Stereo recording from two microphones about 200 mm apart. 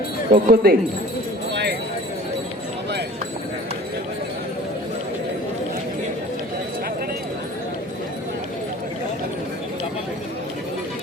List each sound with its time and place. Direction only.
0.3 s speech: 45° right (ahead or behind)